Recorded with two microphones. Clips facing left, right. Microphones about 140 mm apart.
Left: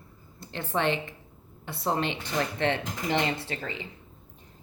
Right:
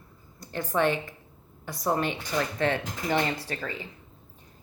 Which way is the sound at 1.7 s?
25° left (ahead or behind).